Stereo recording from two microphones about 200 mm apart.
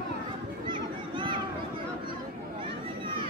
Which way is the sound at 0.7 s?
25° right (ahead or behind).